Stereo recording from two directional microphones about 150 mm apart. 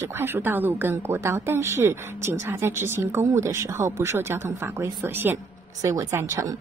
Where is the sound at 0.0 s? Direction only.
15° right (ahead or behind).